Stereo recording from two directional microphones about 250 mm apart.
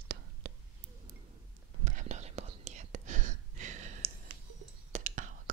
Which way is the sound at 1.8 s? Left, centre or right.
Right.